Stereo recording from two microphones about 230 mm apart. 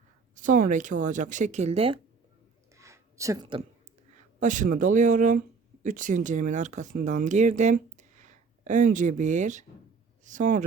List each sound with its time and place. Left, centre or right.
0.3 s speech: right
2.7 s a sound: centre
4.4 s speech: right